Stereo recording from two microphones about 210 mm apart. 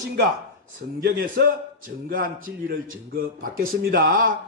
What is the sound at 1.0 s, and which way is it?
A man's voice, 45° right (ahead or behind).